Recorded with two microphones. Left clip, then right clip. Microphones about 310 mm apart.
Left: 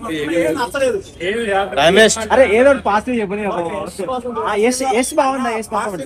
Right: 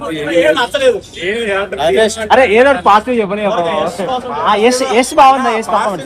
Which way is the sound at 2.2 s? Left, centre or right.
Right.